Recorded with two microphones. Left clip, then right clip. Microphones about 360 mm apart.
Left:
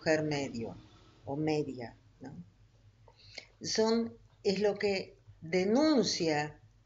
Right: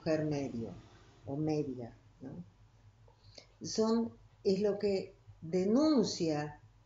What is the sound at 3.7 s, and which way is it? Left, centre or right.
Speech, centre.